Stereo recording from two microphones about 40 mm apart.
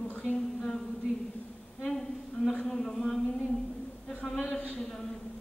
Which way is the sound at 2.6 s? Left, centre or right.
Centre.